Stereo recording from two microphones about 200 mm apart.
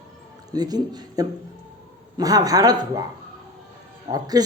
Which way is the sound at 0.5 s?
20° right (ahead or behind).